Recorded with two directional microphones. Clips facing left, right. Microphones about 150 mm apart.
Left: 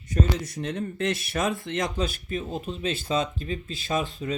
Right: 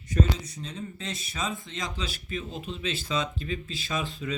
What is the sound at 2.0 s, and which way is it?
Speech, 50° left (ahead or behind).